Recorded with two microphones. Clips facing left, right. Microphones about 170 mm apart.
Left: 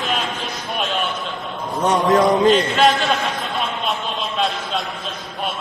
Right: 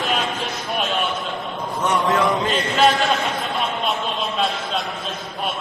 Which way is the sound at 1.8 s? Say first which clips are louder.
Left 4 dB; 40° left (ahead or behind).